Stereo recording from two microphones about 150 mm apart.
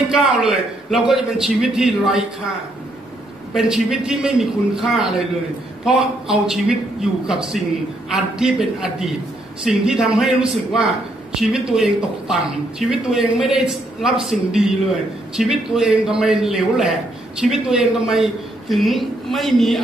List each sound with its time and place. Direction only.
0.1 s a man's voice: 5° right (ahead or behind)
3.5 s a man's voice: 5° right (ahead or behind)